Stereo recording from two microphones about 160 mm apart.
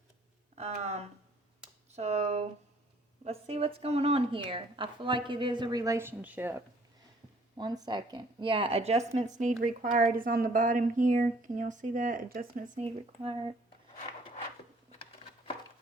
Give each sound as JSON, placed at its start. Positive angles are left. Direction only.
{"t": 0.5, "sound": "a woman's voice", "side_deg": -45}
{"t": 7.6, "sound": "a woman's voice", "side_deg": -25}
{"t": 12.8, "sound": "a woman's voice", "side_deg": -35}